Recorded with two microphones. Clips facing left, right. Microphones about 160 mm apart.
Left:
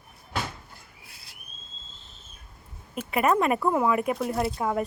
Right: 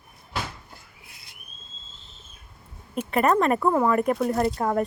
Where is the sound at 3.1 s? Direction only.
5° left (ahead or behind).